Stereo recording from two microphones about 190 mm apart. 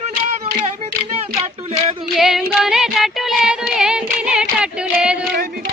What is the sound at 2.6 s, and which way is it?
Music, centre (ahead or behind).